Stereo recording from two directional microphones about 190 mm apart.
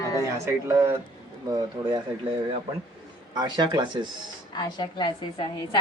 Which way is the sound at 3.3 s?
25° right (ahead or behind).